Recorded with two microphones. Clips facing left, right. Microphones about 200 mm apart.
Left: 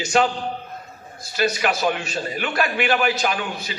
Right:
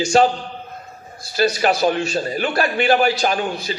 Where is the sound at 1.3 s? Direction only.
35° right (ahead or behind).